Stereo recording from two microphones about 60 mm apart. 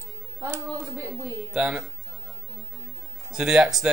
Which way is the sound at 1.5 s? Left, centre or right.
Right.